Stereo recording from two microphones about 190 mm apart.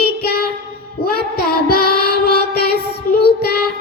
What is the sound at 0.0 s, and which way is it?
Child singing, 55° left (ahead or behind).